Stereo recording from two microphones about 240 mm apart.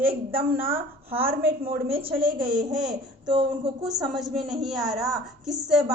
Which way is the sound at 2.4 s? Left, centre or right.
Centre.